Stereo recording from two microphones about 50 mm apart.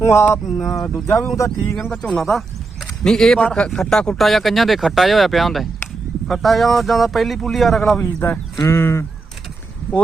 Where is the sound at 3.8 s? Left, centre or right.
Centre.